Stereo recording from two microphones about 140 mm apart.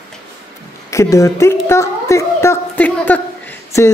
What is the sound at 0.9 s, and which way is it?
A woman's voice, 20° left (ahead or behind).